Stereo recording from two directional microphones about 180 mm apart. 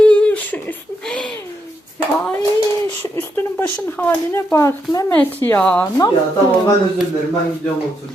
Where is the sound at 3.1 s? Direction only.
10° left (ahead or behind).